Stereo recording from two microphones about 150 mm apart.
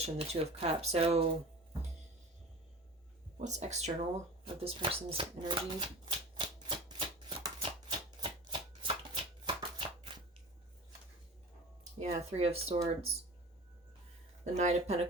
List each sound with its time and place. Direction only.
0.0 s speech: 45° right (ahead or behind)
3.3 s speech: 50° right (ahead or behind)
4.4 s shuffling cards: 40° right (ahead or behind)
11.9 s speech: 45° right (ahead or behind)
14.4 s speech: 50° right (ahead or behind)